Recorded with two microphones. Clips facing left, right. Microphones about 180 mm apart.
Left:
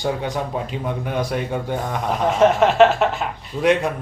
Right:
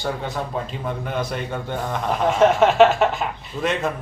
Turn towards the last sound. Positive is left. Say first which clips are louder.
# left 6 dB
turn(degrees=15)  # may be behind; listen again after turning